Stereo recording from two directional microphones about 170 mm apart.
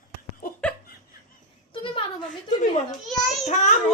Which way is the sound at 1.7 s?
30° left (ahead or behind).